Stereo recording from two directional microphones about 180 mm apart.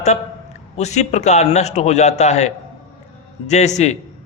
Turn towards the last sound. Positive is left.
turn(degrees=40)  # may be behind; listen again after turning